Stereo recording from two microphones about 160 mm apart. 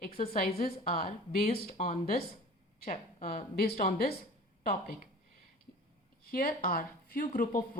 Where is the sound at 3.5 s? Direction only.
70° left (ahead or behind).